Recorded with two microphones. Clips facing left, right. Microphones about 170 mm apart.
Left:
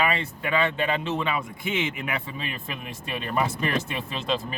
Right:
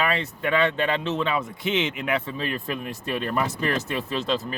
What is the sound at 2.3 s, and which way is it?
Speech, 40° right (ahead or behind).